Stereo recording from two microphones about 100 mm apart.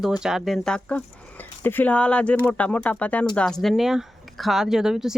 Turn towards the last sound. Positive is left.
turn(degrees=-5)  # may be behind; listen again after turning